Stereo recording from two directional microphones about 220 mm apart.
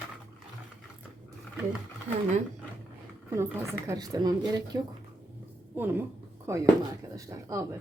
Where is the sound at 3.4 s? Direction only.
10° right (ahead or behind).